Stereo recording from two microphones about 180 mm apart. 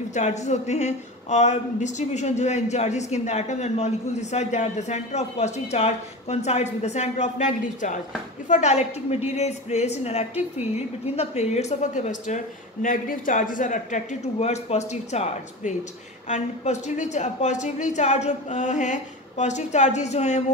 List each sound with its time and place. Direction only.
0.1 s a man's voice: 40° left (ahead or behind)